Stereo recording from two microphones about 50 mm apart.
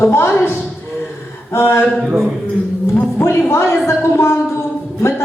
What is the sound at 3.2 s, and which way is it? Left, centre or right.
Speech, left.